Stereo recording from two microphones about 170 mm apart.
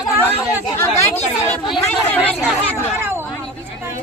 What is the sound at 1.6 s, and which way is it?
Speech, 5° left (ahead or behind).